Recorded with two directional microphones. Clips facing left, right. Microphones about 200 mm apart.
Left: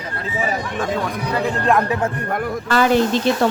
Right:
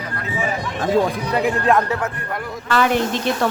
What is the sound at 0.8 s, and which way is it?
Speech, 35° right (ahead or behind).